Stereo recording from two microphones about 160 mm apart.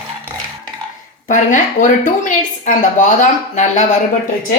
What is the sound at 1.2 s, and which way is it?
Speech, 55° left (ahead or behind).